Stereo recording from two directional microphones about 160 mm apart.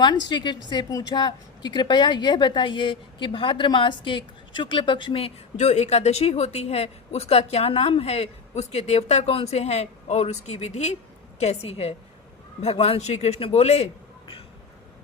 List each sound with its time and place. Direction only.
0.3 s a woman's voice: 30° left (ahead or behind)